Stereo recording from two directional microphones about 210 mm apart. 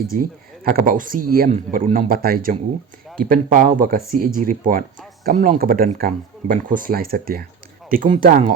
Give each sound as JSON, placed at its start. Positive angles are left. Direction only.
{"t": 0.1, "sound": "speech", "side_deg": -40}